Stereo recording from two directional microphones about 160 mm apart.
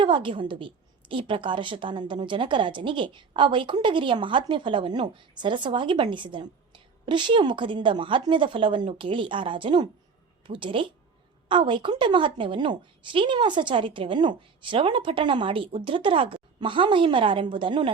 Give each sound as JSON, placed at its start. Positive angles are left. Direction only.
{"t": 0.0, "sound": "a woman's voice", "side_deg": -30}